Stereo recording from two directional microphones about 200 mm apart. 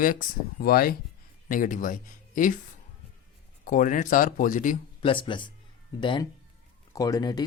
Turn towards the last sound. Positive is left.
turn(degrees=20)  # may be behind; listen again after turning